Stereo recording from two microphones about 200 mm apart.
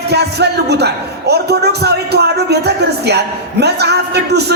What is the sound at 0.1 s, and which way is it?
Speech, 55° right (ahead or behind).